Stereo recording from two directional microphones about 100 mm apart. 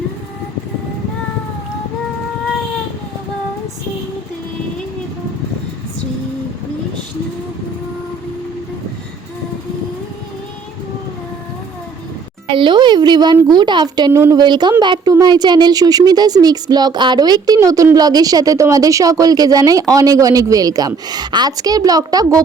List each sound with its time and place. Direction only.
12.5 s a child's voice: 55° right (ahead or behind)
14.1 s a woman's voice: 30° right (ahead or behind)
14.3 s a child's voice: 50° right (ahead or behind)